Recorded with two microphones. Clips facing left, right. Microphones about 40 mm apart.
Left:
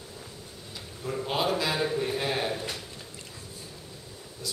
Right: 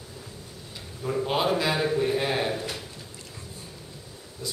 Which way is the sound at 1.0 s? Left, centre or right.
Centre.